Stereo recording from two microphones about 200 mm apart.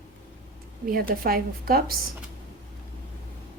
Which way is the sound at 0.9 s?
45° right (ahead or behind).